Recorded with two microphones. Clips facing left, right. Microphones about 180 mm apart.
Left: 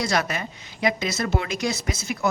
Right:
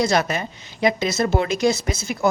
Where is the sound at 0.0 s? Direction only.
25° right (ahead or behind).